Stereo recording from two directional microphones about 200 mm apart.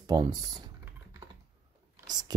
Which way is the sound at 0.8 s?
15° right (ahead or behind).